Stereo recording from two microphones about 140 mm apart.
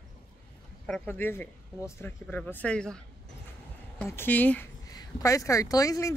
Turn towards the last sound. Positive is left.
turn(degrees=25)  # may be behind; listen again after turning